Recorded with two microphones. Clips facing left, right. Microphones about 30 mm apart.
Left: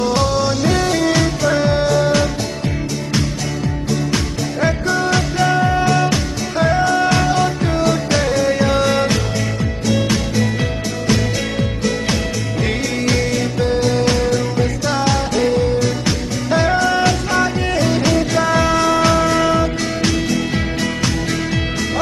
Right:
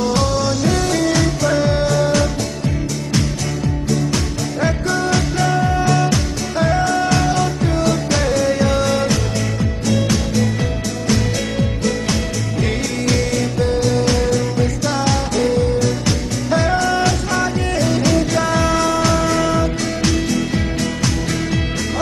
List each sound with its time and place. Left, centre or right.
0.0 s music: centre
4.6 s music: centre
13.0 s music: centre
14.2 s music: centre